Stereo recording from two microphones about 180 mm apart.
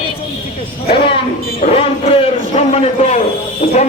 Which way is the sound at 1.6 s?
35° left (ahead or behind).